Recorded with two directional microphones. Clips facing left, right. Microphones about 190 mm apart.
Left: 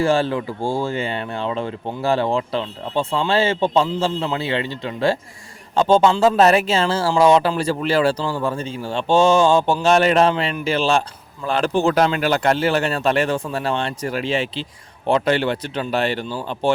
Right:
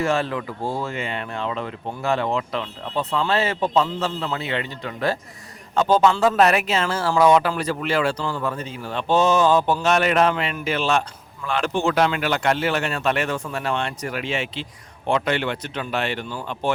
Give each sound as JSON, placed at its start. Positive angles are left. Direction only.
{"t": 0.0, "sound": "speech", "side_deg": 30}